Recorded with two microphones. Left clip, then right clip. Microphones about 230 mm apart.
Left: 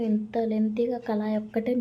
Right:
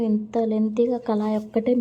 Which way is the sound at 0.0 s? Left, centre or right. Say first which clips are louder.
Right 4 dB; centre.